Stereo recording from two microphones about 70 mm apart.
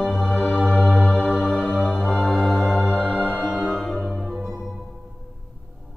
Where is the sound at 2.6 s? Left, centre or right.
Centre.